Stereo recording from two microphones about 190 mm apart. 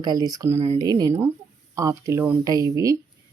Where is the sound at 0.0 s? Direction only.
20° right (ahead or behind).